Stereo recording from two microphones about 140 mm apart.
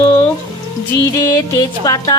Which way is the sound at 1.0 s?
25° left (ahead or behind).